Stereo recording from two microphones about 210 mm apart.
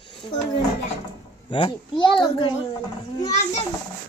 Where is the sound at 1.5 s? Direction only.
25° left (ahead or behind).